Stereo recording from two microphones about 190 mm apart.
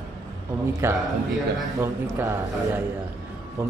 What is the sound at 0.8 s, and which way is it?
Mantra, 15° right (ahead or behind).